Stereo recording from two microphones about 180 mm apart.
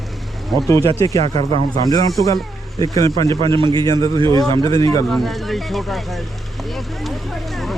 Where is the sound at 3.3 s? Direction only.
30° right (ahead or behind).